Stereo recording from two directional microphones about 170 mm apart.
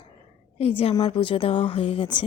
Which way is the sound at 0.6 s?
35° left (ahead or behind).